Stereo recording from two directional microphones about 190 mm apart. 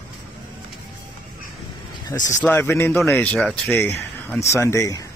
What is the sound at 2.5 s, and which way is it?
Speech, 10° left (ahead or behind).